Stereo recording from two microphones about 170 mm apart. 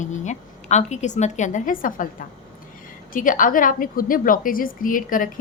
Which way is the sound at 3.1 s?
50° left (ahead or behind).